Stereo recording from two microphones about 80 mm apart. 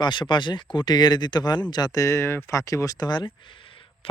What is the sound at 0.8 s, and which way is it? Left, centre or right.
Speech, left.